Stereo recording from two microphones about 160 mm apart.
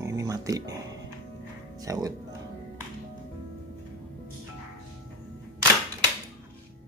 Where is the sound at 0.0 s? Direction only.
20° right (ahead or behind).